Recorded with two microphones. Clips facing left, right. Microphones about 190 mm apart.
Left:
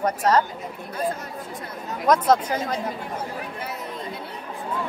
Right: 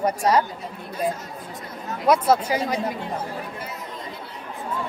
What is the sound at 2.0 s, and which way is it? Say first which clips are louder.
Speech: even; 10° right (ahead or behind).